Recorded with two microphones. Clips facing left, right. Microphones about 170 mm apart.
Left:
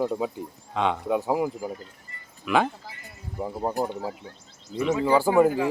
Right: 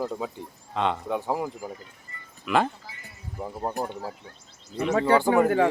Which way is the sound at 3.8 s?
20° left (ahead or behind).